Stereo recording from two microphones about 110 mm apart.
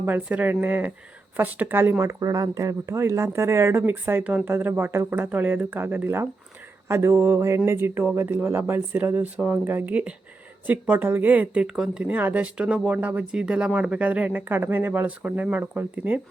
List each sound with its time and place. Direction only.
0.0 s speech: 15° right (ahead or behind)